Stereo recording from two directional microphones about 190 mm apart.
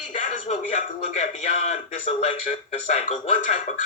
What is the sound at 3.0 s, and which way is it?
Speech, 40° left (ahead or behind).